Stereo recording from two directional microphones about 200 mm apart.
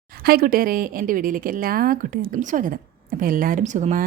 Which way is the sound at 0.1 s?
50° right (ahead or behind).